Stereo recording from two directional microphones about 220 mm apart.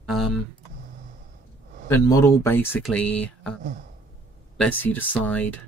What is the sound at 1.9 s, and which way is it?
Speech, 10° left (ahead or behind).